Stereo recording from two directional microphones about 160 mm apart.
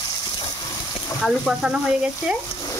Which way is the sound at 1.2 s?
Centre (ahead or behind).